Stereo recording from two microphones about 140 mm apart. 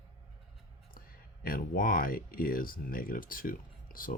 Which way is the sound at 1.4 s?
85° left.